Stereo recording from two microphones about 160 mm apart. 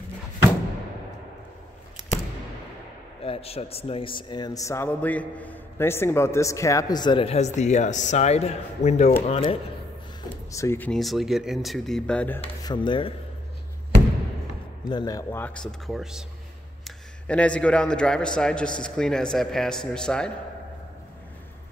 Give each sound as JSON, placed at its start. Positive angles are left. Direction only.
{"t": 3.3, "sound": "a man's voice", "side_deg": 40}
{"t": 10.5, "sound": "speech", "side_deg": 15}
{"t": 10.9, "sound": "a man's voice", "side_deg": 0}
{"t": 12.6, "sound": "a man's voice", "side_deg": 30}
{"t": 14.9, "sound": "a man's voice", "side_deg": 25}